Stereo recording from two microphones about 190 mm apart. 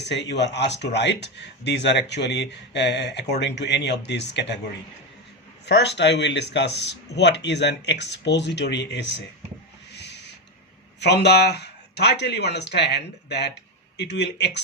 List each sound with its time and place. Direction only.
0.0 s speech: 65° left (ahead or behind)
5.6 s speech: 65° left (ahead or behind)
9.9 s owl: 65° left (ahead or behind)
11.0 s speech: 60° left (ahead or behind)